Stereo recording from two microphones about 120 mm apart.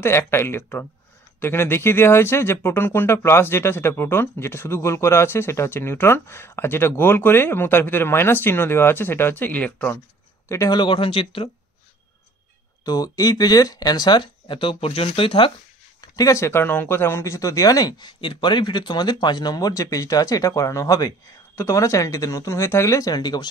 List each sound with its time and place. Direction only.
0.0 s speech: 20° left (ahead or behind)
10.5 s speech: 25° left (ahead or behind)
10.8 s speech: 45° left (ahead or behind)
12.8 s speech: 30° left (ahead or behind); by 15.5 s 50° left (ahead or behind)
16.0 s speech: 30° left (ahead or behind)